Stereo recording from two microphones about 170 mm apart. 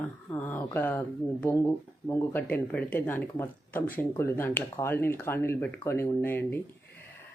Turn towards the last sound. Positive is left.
turn(degrees=10)  # may be behind; listen again after turning